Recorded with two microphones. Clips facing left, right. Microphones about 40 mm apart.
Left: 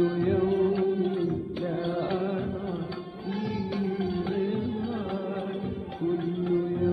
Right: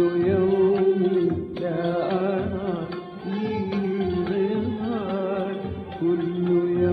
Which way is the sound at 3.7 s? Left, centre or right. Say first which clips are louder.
Right 4 dB; right.